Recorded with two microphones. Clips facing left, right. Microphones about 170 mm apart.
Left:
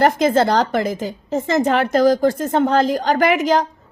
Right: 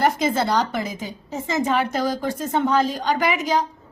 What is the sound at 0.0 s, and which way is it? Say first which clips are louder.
A woman's voice: left 6 dB; 55° left (ahead or behind).